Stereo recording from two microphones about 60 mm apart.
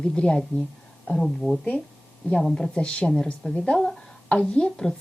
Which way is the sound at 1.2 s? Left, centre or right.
Centre.